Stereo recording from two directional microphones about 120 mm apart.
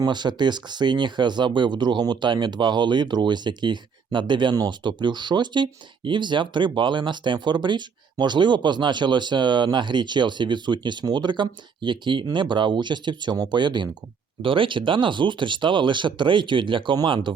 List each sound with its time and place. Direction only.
0.0 s speech: 40° right (ahead or behind)